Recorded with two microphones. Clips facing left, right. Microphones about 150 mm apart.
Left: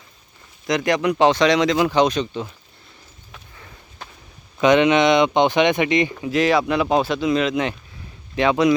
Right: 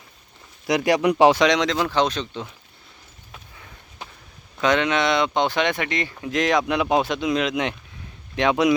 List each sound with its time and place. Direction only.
0.7 s speech: 10° right (ahead or behind); by 2.5 s 10° left (ahead or behind)
4.6 s speech: 20° left (ahead or behind)
6.1 s speech: 5° left (ahead or behind)